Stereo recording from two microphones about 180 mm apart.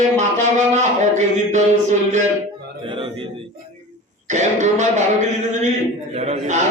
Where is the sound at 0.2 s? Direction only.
40° right (ahead or behind).